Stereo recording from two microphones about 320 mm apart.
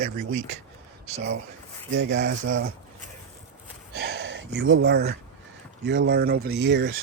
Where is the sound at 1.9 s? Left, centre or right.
Right.